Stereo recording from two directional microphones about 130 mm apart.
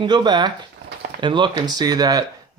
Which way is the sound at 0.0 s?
35° right (ahead or behind).